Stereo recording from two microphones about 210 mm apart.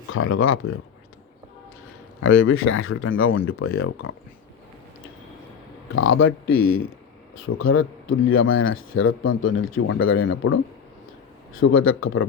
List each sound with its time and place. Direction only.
0.1 s speech: 80° left
2.2 s a man's voice: 80° left
5.9 s a man's voice: 70° left (ahead or behind)
7.5 s a man's voice: 75° left (ahead or behind)